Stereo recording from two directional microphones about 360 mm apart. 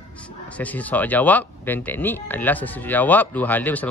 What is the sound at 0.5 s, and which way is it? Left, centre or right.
Speech, centre.